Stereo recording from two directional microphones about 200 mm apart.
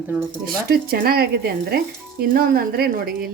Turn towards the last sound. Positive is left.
turn(degrees=-50)  # may be behind; listen again after turning